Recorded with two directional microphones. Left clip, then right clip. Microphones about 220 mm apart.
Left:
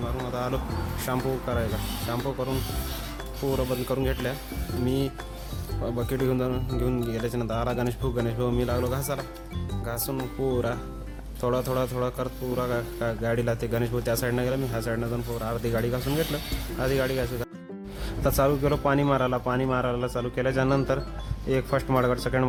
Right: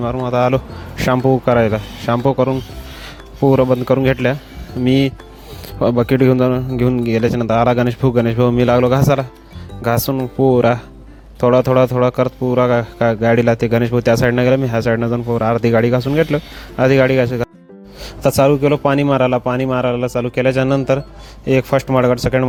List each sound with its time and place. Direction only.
0.3 s speech: 35° right (ahead or behind)
3.5 s a man's voice: 35° right (ahead or behind)